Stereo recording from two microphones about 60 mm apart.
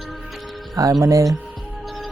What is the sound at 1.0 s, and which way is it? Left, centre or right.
Music, right.